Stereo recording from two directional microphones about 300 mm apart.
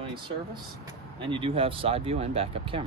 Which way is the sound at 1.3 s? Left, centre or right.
Centre.